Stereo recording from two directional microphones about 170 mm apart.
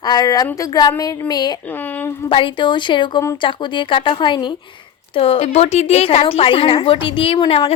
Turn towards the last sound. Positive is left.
turn(degrees=35)  # may be behind; listen again after turning